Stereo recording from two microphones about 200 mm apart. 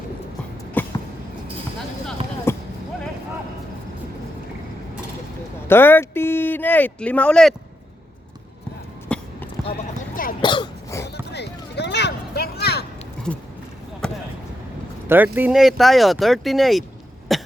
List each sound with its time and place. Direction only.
0.7 s cough: 10° left (ahead or behind)
2.0 s a sound: 10° left (ahead or behind)
5.6 s speech: 10° left (ahead or behind)
9.1 s a sound: 5° left (ahead or behind)
10.4 s throat clearing: 25° left (ahead or behind)
11.1 s a sound: 55° left (ahead or behind)
13.3 s speech: 5° left (ahead or behind)
14.0 s basketball bounce: 5° left (ahead or behind)
15.1 s speech: 10° right (ahead or behind)
17.3 s cough: centre (ahead or behind)